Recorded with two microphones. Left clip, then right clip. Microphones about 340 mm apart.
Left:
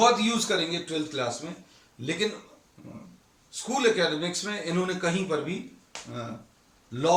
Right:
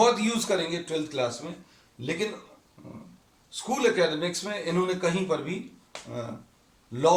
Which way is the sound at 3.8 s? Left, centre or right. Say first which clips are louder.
Even; centre.